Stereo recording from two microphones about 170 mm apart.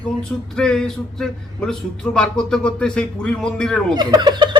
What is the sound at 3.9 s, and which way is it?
Speech, 25° right (ahead or behind).